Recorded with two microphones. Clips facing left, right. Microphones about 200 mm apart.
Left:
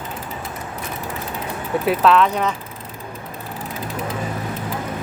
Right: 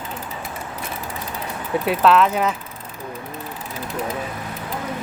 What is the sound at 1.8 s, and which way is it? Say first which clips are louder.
Speech: even; centre (ahead or behind).